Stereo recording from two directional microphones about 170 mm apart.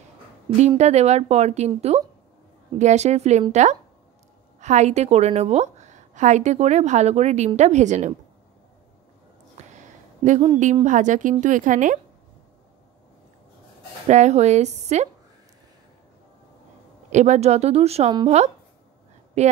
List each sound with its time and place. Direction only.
0.6 s speech: 40° right (ahead or behind)
4.6 s a woman's voice: 45° right (ahead or behind)
9.8 s a sound: 45° right (ahead or behind)
10.6 s a woman's voice: 45° right (ahead or behind)
14.0 s speech: 40° right (ahead or behind)
17.1 s speech: 45° right (ahead or behind)